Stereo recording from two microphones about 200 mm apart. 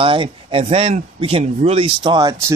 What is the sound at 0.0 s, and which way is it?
Speech, 25° right (ahead or behind).